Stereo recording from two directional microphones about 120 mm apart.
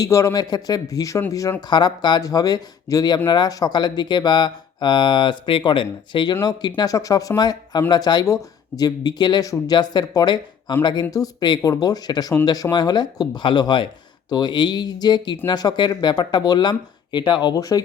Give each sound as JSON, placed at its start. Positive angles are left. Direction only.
{"t": 0.0, "sound": "a man's voice", "side_deg": 25}